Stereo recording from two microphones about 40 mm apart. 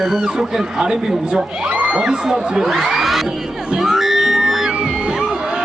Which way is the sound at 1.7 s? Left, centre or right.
Right.